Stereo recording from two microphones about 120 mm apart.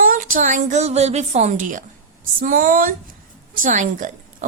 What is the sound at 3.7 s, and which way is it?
Speech, 90° right.